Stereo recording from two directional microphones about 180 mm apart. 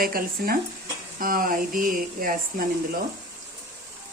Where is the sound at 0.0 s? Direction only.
55° right (ahead or behind).